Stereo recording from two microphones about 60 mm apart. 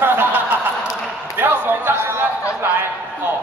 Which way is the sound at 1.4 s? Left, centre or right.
Right.